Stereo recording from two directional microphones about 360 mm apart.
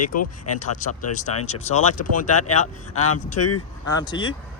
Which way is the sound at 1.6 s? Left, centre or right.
Centre.